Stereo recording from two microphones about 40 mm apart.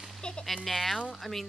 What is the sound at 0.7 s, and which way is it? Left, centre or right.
Speech, centre.